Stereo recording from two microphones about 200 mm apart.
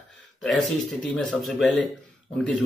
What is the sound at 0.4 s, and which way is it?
Speech, centre (ahead or behind).